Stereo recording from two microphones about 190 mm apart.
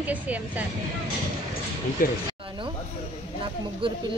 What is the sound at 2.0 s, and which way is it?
Speech, 50° left (ahead or behind).